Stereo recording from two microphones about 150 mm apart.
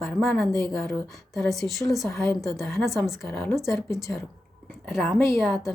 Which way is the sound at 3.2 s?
15° left (ahead or behind).